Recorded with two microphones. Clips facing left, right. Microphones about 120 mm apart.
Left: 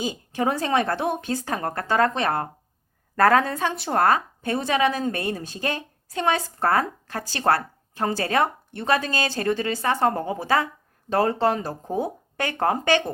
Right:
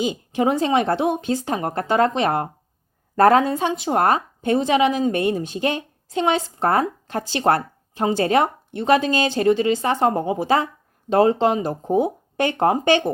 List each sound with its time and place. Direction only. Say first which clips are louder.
0.0 s a woman's voice: right 4 dB; 20° right (ahead or behind)